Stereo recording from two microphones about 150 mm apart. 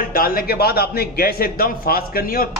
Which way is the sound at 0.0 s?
70° left (ahead or behind).